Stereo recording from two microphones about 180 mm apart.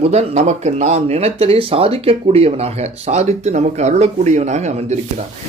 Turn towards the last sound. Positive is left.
turn(degrees=-40)  # may be behind; listen again after turning